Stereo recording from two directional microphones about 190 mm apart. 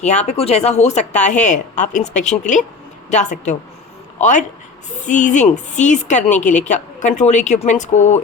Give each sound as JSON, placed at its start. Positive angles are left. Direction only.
{"t": 0.0, "sound": "a woman's voice", "side_deg": 35}